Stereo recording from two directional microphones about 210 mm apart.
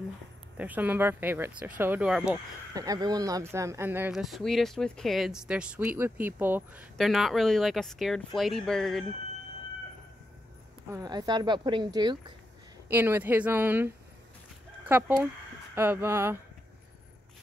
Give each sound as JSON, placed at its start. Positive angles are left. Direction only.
{"t": 0.6, "sound": "speech", "side_deg": -10}
{"t": 2.7, "sound": "speech", "side_deg": -15}
{"t": 10.9, "sound": "a woman's voice", "side_deg": -20}
{"t": 12.9, "sound": "speech", "side_deg": -10}